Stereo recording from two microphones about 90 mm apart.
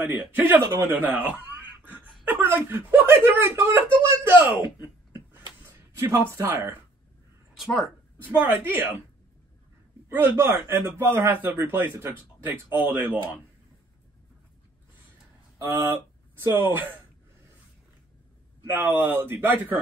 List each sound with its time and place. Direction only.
0.0 s speech: 20° right (ahead or behind)
0.5 s speech: 30° right (ahead or behind)
0.9 s speech: 20° right (ahead or behind)
5.1 s a sound: 25° right (ahead or behind)
6.4 s speech: 25° right (ahead or behind)
7.5 s speech: centre (ahead or behind)
8.3 s speech: 25° right (ahead or behind)
10.0 s speech: 25° right (ahead or behind)
15.6 s speech: 30° right (ahead or behind)
18.7 s speech: 25° right (ahead or behind)